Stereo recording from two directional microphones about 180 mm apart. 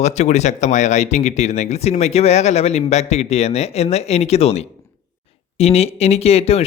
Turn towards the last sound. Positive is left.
turn(degrees=35)  # may be behind; listen again after turning